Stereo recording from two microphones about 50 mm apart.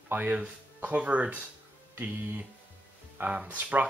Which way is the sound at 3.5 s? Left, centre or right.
Right.